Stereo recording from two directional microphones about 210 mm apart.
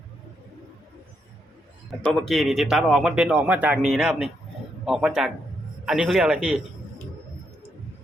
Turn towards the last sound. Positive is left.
turn(degrees=-5)  # may be behind; listen again after turning